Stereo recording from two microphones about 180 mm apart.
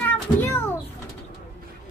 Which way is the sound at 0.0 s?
10° left (ahead or behind).